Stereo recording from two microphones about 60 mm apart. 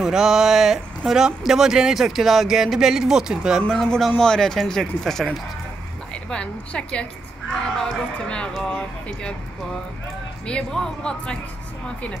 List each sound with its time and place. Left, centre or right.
0.0 s speech: centre
3.6 s speech: centre
6.1 s a woman's voice: centre
10.4 s speech: centre